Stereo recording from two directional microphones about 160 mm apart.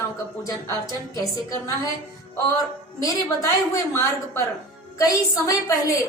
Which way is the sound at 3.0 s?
20° left (ahead or behind).